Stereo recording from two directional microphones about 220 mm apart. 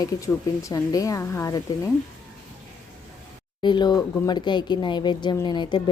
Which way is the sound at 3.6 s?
20° left (ahead or behind).